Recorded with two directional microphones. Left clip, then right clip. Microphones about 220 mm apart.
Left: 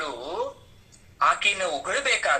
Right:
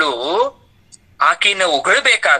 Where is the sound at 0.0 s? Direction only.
40° right (ahead or behind).